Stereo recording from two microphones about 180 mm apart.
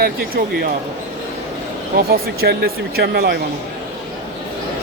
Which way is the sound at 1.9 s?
60° right (ahead or behind).